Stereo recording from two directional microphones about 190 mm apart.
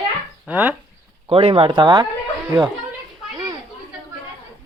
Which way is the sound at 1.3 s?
30° right (ahead or behind).